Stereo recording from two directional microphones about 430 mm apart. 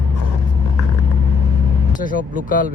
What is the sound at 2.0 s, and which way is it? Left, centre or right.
Speech, centre.